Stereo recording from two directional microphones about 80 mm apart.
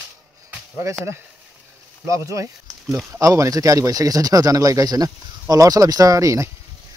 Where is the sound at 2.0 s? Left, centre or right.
Right.